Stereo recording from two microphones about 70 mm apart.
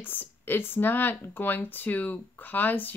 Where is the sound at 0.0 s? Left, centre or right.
Left.